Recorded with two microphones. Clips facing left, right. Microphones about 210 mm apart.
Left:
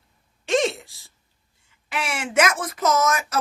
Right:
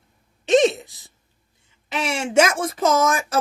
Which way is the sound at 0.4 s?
20° right (ahead or behind).